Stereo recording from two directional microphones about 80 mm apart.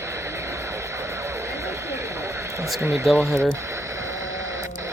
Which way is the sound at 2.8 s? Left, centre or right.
Right.